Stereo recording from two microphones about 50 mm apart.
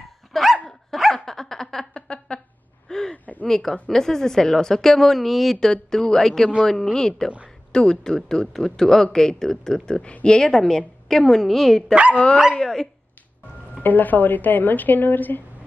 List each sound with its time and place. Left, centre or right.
0.3 s dog: centre
2.9 s gasp: centre
3.4 s speech: centre
5.7 s a woman's voice: centre
11.9 s speech: right
12.5 s speech: centre
13.8 s speech: left